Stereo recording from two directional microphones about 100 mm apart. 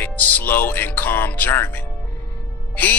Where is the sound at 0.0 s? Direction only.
15° left (ahead or behind).